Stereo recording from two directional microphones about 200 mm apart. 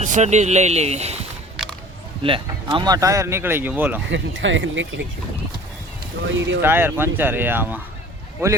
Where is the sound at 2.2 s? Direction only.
25° right (ahead or behind); by 3.9 s 10° right (ahead or behind).